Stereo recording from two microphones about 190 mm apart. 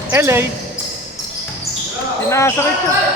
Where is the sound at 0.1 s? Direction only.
15° right (ahead or behind).